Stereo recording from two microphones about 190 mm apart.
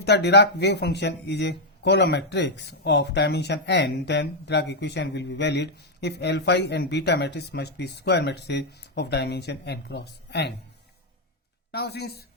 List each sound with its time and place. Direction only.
0.0 s speech: 60° left (ahead or behind)
11.7 s speech: 60° left (ahead or behind)